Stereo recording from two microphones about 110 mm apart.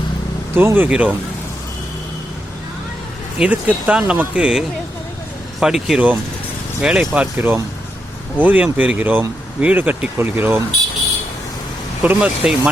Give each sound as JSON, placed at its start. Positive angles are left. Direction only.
{"t": 0.5, "sound": "speech", "side_deg": -20}
{"t": 3.3, "sound": "speech", "side_deg": -10}
{"t": 7.3, "sound": "speech", "side_deg": -20}
{"t": 12.0, "sound": "speech", "side_deg": -10}